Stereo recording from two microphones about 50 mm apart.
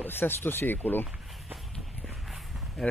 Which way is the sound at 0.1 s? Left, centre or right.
Left.